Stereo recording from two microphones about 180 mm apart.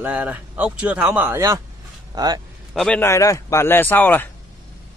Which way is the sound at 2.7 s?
Centre (ahead or behind).